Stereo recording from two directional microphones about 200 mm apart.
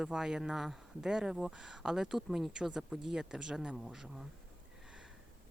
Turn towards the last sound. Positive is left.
turn(degrees=0)  # may be behind; listen again after turning